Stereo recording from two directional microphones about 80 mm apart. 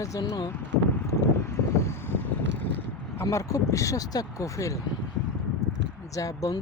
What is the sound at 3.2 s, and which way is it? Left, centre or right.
Speech, left.